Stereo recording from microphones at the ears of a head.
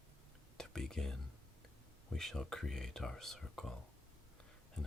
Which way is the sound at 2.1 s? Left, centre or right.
Centre.